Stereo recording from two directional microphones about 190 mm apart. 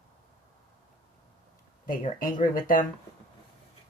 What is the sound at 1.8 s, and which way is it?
Speech, 45° left (ahead or behind).